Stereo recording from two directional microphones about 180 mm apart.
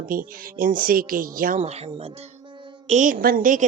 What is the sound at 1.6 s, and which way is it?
Speech, 35° right (ahead or behind).